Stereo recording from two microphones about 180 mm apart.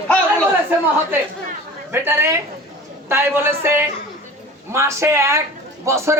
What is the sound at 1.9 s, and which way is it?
A man's voice, 15° right (ahead or behind).